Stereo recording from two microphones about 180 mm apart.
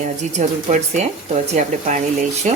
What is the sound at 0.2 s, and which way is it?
Speech, 40° right (ahead or behind).